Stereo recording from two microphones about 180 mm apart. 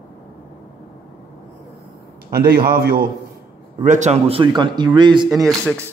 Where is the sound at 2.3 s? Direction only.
55° right (ahead or behind).